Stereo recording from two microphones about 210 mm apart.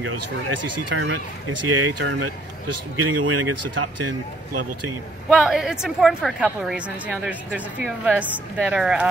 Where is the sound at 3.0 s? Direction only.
90° right.